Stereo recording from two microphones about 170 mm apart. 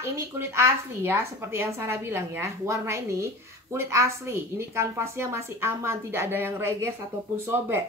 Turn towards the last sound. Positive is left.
turn(degrees=-15)  # may be behind; listen again after turning